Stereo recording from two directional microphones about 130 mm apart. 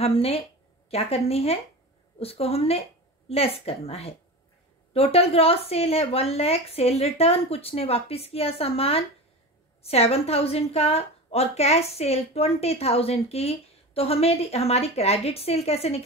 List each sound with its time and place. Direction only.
0.0 s a woman's voice: 50° left (ahead or behind)